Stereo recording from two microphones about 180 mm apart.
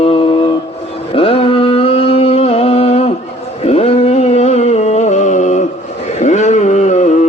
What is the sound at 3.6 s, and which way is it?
Music, 35° left (ahead or behind).